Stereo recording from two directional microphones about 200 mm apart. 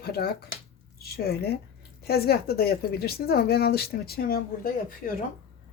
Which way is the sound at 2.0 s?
50° left (ahead or behind).